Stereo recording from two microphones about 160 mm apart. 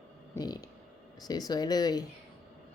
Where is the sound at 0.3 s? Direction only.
25° left (ahead or behind).